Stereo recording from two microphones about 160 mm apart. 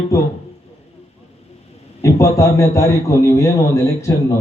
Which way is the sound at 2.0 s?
20° left (ahead or behind).